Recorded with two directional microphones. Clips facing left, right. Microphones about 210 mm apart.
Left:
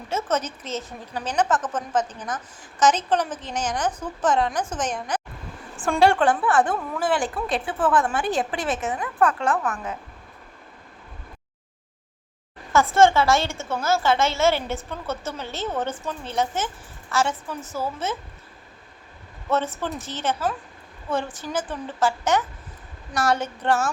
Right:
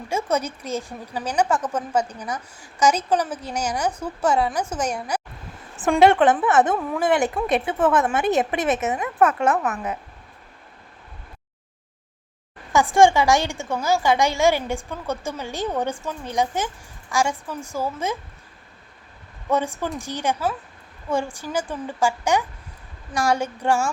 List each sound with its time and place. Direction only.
0.1 s a woman's voice: 10° right (ahead or behind)
5.7 s a woman's voice: 20° right (ahead or behind)
12.7 s a woman's voice: 15° right (ahead or behind)
19.5 s a woman's voice: 10° right (ahead or behind)